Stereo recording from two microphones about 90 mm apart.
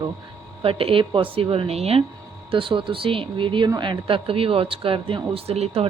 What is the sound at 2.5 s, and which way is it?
Speech, 75° right (ahead or behind).